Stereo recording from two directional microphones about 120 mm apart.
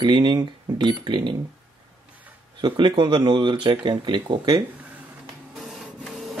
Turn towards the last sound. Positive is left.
turn(degrees=0)  # may be behind; listen again after turning